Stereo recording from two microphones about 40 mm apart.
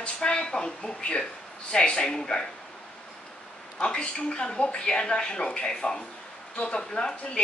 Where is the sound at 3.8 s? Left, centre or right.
Left.